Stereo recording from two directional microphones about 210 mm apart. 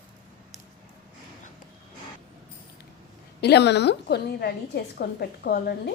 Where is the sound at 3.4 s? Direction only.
55° left (ahead or behind).